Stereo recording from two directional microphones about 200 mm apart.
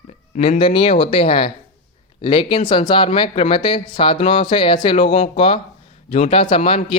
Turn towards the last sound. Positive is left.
turn(degrees=30)  # may be behind; listen again after turning